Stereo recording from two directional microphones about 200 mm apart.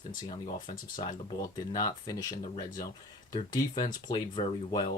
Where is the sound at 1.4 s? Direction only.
20° left (ahead or behind).